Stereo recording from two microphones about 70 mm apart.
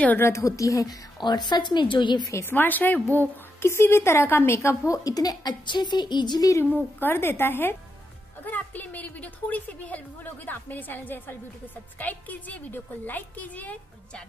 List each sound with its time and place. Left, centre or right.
0.2 s a woman's voice: left
1.2 s a woman's voice: left
2.4 s a woman's voice: left
3.6 s a woman's voice: left
7.0 s a woman's voice: left